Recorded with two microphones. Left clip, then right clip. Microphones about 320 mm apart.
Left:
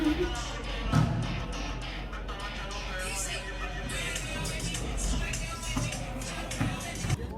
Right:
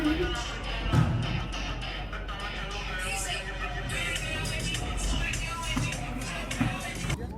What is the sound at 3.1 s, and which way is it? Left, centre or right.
Music, centre.